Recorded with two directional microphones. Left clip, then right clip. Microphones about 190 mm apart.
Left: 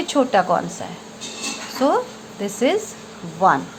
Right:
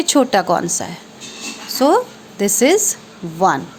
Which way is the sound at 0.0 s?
45° right (ahead or behind).